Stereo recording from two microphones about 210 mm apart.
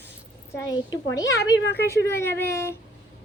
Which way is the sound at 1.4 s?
50° left (ahead or behind).